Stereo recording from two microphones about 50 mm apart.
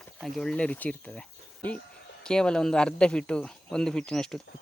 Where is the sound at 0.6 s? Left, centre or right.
Left.